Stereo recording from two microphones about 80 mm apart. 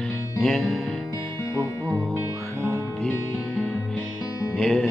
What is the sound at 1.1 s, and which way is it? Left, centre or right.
Music, left.